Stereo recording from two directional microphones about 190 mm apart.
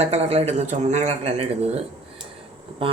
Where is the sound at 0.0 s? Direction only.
35° right (ahead or behind).